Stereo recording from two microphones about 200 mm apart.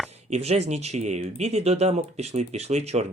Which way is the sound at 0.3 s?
30° right (ahead or behind).